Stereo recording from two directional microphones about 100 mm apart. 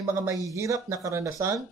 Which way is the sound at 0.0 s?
25° right (ahead or behind).